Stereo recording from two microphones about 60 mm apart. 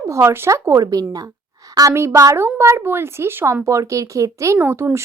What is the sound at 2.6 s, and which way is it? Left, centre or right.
Speech, right.